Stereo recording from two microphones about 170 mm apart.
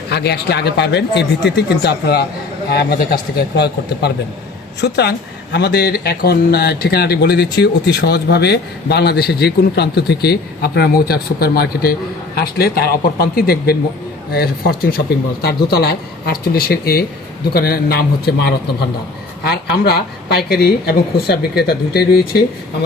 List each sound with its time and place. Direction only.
0.1 s a man's voice: 75° left (ahead or behind)